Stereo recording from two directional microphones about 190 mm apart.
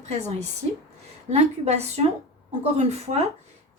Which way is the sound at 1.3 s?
35° right (ahead or behind).